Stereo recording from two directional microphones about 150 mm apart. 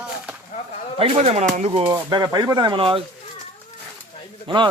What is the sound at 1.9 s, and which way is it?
Speech, 25° right (ahead or behind).